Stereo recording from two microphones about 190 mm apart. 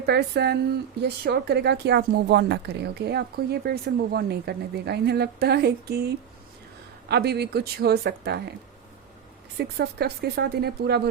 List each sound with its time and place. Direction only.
0.0 s speech: 60° right (ahead or behind)
7.1 s speech: 60° right (ahead or behind)
9.6 s speech: 60° right (ahead or behind)